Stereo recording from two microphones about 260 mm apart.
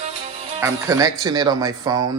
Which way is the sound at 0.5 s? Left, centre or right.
Centre.